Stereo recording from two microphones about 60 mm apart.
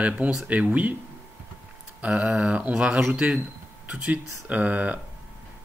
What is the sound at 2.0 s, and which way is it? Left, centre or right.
Speech, right.